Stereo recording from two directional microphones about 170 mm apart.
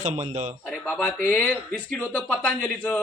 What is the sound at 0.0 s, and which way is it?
Speech, 40° right (ahead or behind).